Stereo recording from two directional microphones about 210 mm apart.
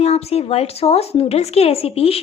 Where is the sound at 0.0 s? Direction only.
30° left (ahead or behind).